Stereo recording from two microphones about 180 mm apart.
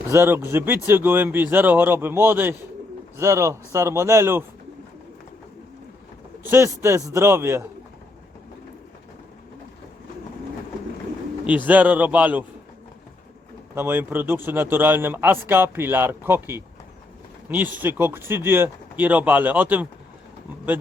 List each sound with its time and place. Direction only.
0.1 s speech: 15° right (ahead or behind)
6.4 s speech: 15° right (ahead or behind)
11.4 s speech: 10° right (ahead or behind)
13.7 s speech: 10° right (ahead or behind)